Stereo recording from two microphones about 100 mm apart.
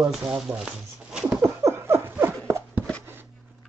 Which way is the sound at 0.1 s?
5° right (ahead or behind).